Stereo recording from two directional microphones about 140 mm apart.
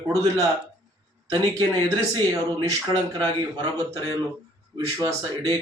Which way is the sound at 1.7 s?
30° right (ahead or behind).